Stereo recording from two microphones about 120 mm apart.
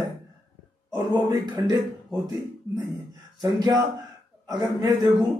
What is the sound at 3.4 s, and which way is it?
Speech, 30° right (ahead or behind).